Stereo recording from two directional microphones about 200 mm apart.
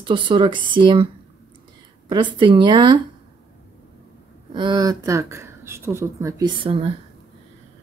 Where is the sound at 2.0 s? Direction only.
25° right (ahead or behind).